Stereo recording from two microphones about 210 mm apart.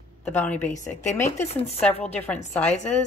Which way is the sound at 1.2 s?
30° left (ahead or behind).